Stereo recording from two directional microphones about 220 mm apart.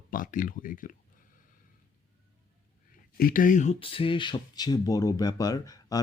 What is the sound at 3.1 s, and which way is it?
Speech, 40° left (ahead or behind).